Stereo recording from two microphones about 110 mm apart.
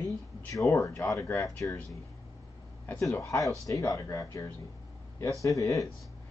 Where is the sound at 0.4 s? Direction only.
25° left (ahead or behind).